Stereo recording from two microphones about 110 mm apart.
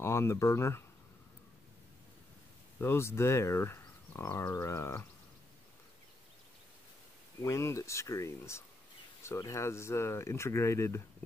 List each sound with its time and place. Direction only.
0.0 s speech: 25° left (ahead or behind)
2.8 s speech: 25° left (ahead or behind)
7.4 s speech: 25° left (ahead or behind)